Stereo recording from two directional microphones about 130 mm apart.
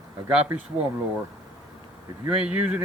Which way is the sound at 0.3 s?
10° right (ahead or behind).